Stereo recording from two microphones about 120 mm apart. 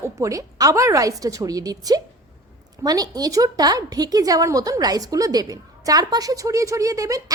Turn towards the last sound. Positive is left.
turn(degrees=-30)  # may be behind; listen again after turning